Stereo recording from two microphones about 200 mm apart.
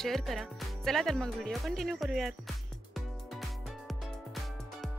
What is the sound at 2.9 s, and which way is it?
Music, centre (ahead or behind).